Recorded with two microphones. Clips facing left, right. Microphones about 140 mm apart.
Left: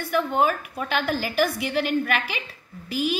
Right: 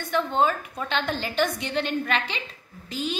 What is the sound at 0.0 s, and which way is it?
A woman's voice, 10° left (ahead or behind).